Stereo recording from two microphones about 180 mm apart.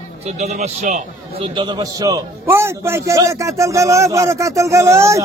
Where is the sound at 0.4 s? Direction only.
40° right (ahead or behind).